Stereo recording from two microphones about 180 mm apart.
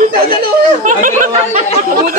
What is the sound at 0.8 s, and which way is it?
Speech, 45° right (ahead or behind).